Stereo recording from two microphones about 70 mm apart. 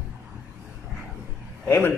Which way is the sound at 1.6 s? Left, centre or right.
Left.